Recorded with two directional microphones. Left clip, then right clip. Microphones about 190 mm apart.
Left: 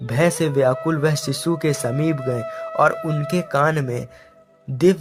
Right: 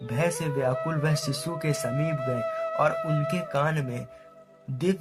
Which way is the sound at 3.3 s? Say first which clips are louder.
Left 12 dB; 40° left (ahead or behind).